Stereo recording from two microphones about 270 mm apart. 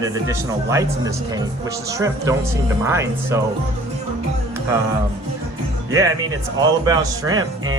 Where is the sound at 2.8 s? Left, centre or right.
Centre.